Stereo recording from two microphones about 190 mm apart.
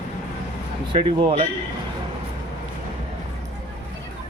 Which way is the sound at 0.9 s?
30° right (ahead or behind).